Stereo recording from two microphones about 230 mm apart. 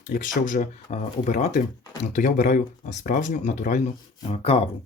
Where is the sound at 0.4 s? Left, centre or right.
Left.